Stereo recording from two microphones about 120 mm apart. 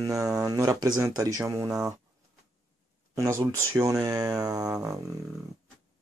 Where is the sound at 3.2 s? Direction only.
25° right (ahead or behind).